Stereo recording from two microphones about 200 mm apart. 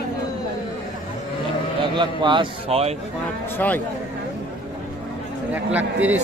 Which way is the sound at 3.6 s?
10° left (ahead or behind).